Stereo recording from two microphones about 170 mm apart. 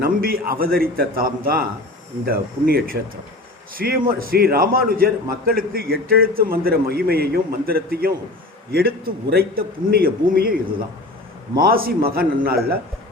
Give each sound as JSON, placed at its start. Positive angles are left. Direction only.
{"t": 0.0, "sound": "a man's voice", "side_deg": -60}